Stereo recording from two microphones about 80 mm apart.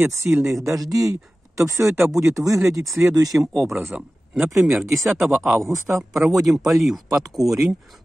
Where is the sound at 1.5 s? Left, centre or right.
Right.